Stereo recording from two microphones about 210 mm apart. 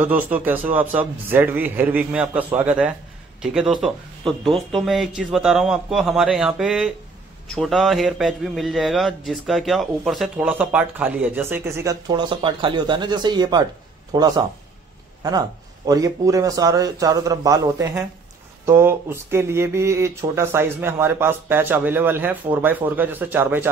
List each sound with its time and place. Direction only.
0.0 s a man's voice: 10° right (ahead or behind)